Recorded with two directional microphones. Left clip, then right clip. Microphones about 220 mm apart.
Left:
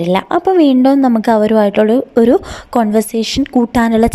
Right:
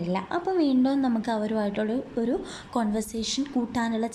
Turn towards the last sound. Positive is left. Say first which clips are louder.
# left 16 dB
turn(degrees=40)  # may be behind; listen again after turning